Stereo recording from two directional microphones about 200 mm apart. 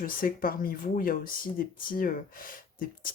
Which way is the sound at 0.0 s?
45° left (ahead or behind).